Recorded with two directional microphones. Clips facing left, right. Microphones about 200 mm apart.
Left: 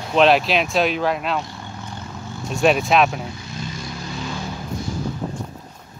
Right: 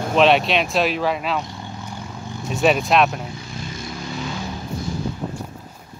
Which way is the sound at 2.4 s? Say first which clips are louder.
Left 1 dB; centre (ahead or behind).